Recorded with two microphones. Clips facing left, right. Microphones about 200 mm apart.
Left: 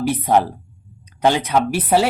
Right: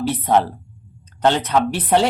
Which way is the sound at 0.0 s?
10° left (ahead or behind).